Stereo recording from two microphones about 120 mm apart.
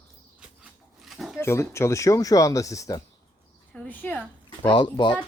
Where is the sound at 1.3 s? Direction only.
20° left (ahead or behind).